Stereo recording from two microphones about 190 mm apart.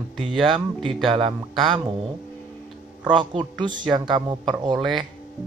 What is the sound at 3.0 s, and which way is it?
Speech, 25° right (ahead or behind).